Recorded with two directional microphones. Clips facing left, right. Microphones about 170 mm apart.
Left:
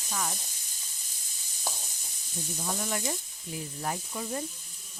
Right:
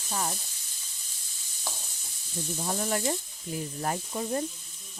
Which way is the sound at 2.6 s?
45° right (ahead or behind).